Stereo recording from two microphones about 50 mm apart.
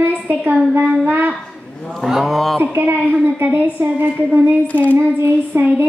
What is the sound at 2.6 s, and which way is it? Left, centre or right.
Speech, right.